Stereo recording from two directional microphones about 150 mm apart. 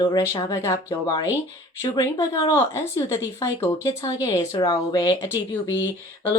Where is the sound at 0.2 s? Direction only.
20° left (ahead or behind).